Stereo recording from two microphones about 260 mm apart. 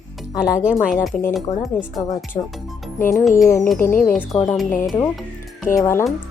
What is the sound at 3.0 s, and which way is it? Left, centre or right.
Speech, centre.